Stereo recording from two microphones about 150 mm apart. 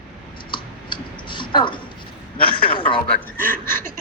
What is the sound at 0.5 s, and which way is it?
Clicking, 30° left (ahead or behind).